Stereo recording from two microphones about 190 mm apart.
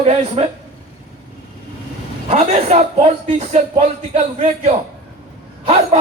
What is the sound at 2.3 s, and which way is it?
Speech, 35° right (ahead or behind).